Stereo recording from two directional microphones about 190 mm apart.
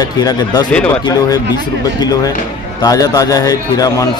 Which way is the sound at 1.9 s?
20° left (ahead or behind).